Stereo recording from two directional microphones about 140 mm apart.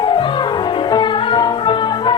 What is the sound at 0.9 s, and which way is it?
Music, 35° left (ahead or behind).